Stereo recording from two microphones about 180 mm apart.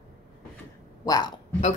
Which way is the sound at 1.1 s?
20° left (ahead or behind).